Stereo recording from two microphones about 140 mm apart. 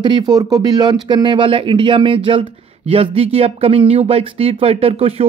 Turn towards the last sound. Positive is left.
turn(degrees=-45)  # may be behind; listen again after turning